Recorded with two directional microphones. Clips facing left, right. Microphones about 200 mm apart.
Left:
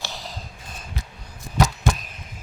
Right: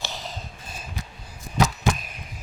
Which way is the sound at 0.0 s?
20° right (ahead or behind).